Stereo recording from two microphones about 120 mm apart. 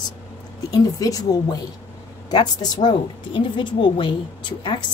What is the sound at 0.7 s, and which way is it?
A woman's voice, 30° left (ahead or behind).